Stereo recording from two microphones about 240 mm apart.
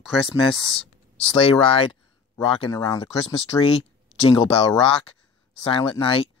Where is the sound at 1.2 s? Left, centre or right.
Left.